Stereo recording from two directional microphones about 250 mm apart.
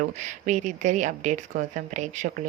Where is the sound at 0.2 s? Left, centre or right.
Right.